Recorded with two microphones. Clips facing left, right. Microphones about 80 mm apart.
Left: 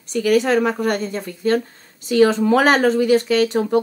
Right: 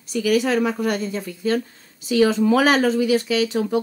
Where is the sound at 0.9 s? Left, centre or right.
Left.